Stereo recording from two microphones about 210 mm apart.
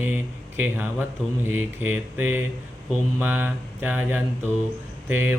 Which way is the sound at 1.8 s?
10° right (ahead or behind).